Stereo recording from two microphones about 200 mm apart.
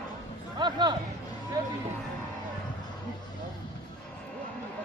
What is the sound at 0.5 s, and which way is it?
Speech, 20° right (ahead or behind).